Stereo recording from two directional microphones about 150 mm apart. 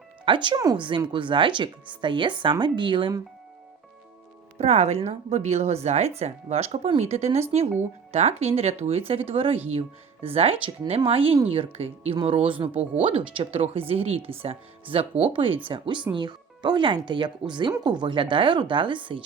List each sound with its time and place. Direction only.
0.3 s speech: 30° right (ahead or behind)
4.5 s speech: 45° right (ahead or behind)